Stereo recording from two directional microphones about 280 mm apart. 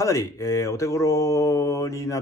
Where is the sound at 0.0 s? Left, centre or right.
Centre.